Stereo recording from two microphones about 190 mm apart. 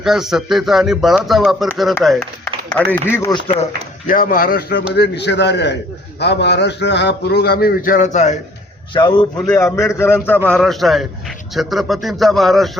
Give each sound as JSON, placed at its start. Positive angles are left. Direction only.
{"t": 0.0, "sound": "speech", "side_deg": 0}
{"t": 3.2, "sound": "speech", "side_deg": 20}
{"t": 4.0, "sound": "a man's voice", "side_deg": 45}
{"t": 8.9, "sound": "a man's voice", "side_deg": 25}